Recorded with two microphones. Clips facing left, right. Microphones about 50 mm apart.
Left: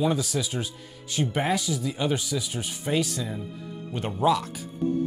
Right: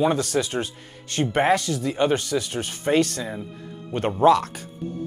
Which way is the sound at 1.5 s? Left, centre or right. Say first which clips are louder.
Right 5 dB; right.